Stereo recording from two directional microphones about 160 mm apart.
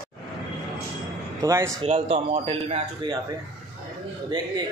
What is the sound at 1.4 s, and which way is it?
Speech, 20° right (ahead or behind).